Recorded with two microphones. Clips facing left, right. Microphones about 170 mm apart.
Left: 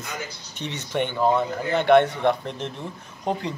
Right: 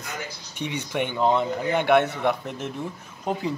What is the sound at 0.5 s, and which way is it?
Speech, 10° right (ahead or behind).